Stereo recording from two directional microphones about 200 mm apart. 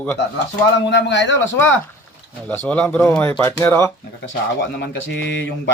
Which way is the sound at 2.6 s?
10° left (ahead or behind).